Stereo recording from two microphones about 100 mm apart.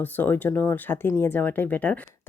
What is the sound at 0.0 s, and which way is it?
Speech, 20° left (ahead or behind).